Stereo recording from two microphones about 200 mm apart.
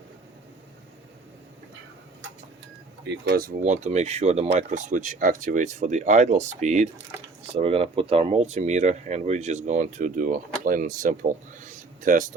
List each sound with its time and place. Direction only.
3.0 s speech: 60° right (ahead or behind); by 12.3 s 40° right (ahead or behind)